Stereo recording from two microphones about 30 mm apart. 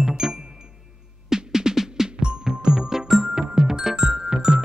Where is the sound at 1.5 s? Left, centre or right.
Centre.